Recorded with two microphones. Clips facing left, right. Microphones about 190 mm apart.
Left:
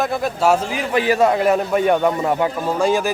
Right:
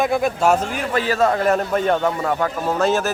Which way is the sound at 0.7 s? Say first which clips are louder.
Left 3 dB; 15° left (ahead or behind).